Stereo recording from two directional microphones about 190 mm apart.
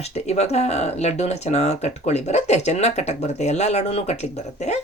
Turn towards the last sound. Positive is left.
turn(degrees=35)  # may be behind; listen again after turning